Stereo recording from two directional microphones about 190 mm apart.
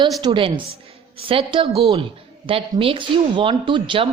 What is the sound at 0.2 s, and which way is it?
Speech, 25° right (ahead or behind).